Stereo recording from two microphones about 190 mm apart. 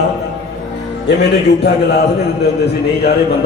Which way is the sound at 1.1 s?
65° left (ahead or behind).